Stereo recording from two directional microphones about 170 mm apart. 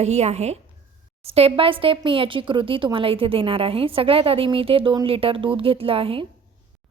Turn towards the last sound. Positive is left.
turn(degrees=-35)  # may be behind; listen again after turning